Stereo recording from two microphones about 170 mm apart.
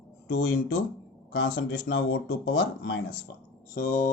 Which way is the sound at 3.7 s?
50° left (ahead or behind).